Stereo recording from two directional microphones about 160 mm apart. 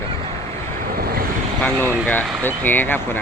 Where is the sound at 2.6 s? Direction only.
10° left (ahead or behind).